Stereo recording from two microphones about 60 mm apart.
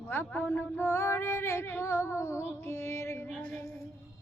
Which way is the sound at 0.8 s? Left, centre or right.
Left.